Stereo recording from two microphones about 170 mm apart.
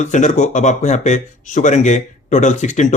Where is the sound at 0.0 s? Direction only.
45° left (ahead or behind).